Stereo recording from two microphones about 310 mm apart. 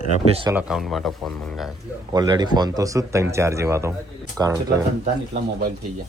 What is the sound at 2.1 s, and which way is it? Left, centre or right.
Speech, centre.